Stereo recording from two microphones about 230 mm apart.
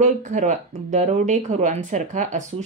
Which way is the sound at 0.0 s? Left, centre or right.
Right.